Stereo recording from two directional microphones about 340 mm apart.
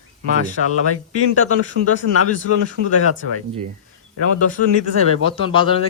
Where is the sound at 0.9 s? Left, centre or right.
Left.